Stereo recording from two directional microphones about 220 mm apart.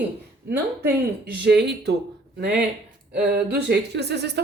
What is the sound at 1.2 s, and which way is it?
Speech, 50° right (ahead or behind).